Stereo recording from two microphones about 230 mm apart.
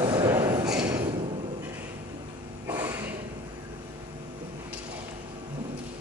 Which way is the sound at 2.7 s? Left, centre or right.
Centre.